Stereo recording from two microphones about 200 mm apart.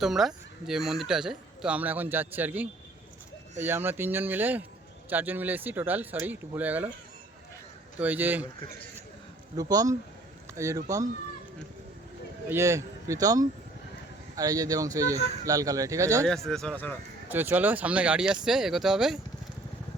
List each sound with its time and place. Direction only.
0.0 s speech: centre (ahead or behind)
7.9 s speech: 10° right (ahead or behind)
9.6 s speech: 20° right (ahead or behind)
12.5 s speech: 15° right (ahead or behind)
16.2 s speech: centre (ahead or behind)
17.2 s speech: 10° right (ahead or behind)